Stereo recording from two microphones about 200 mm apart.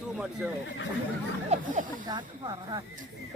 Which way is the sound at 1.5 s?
40° right (ahead or behind).